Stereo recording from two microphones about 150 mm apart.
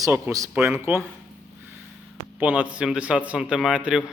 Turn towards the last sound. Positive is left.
turn(degrees=-5)  # may be behind; listen again after turning